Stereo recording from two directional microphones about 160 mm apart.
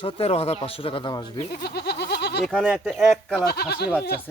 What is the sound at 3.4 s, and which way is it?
Goat, 80° left.